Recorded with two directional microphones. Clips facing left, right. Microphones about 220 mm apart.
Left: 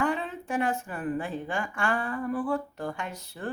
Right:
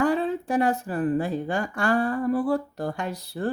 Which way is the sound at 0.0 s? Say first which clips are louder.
Right 6 dB; 35° right (ahead or behind).